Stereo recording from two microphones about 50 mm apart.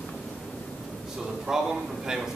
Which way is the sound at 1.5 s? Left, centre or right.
Centre.